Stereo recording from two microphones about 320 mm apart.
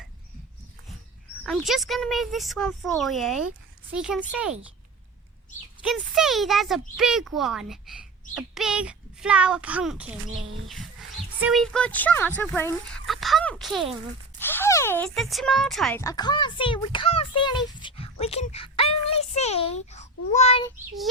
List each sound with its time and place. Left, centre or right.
1.5 s speech: centre
5.8 s speech: centre
11.3 s a child's voice: centre